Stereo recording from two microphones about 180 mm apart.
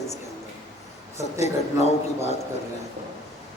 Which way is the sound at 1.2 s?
40° left (ahead or behind).